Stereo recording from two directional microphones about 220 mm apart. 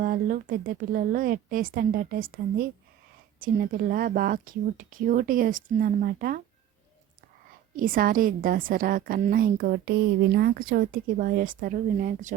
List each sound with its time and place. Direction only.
0.0 s speech: 40° right (ahead or behind)
7.8 s speech: 40° right (ahead or behind)